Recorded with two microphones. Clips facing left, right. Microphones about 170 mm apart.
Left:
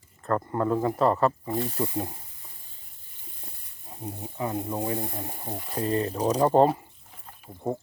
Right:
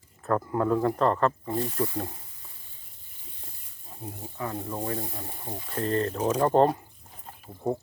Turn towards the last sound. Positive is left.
turn(degrees=0)  # may be behind; listen again after turning